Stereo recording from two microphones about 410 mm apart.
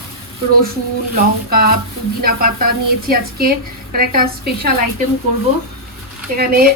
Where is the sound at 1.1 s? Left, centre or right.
Right.